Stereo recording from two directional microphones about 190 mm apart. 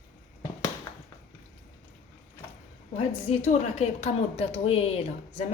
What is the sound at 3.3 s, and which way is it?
A woman's voice, 35° left (ahead or behind).